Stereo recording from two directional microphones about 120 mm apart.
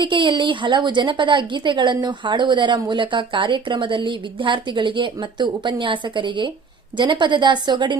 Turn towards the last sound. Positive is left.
turn(degrees=-40)  # may be behind; listen again after turning